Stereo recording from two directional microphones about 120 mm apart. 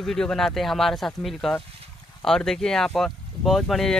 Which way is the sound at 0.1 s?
5° left (ahead or behind).